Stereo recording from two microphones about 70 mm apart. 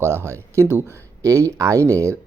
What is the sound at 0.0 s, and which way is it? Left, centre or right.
Speech, right.